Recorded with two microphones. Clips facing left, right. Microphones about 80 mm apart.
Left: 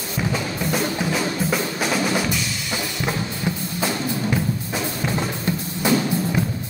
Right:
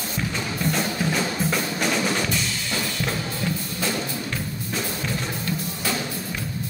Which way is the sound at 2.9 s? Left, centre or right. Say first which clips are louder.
Left 2 dB; left.